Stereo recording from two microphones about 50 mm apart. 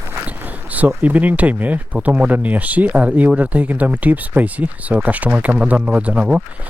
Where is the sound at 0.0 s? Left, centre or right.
Right.